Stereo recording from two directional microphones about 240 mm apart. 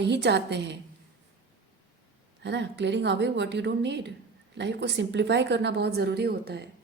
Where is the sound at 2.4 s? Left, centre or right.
Right.